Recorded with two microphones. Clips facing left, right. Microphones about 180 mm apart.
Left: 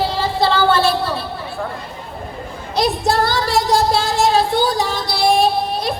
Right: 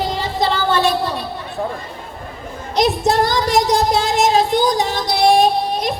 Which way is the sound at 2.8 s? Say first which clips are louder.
Right 2 dB; 20° right (ahead or behind).